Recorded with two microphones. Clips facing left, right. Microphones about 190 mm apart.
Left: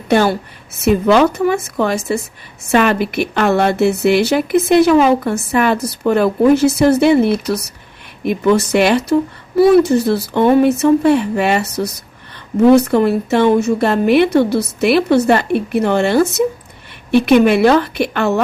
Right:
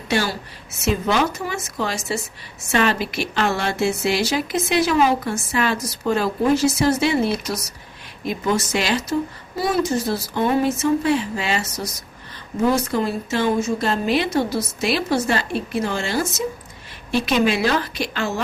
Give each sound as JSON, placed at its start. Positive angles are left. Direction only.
{"t": 0.1, "sound": "speech", "side_deg": 55}